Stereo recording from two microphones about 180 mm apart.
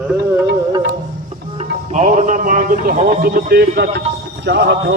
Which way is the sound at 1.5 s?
40° right (ahead or behind).